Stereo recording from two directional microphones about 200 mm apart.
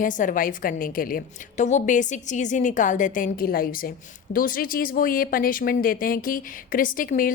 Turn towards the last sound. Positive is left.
turn(degrees=45)  # may be behind; listen again after turning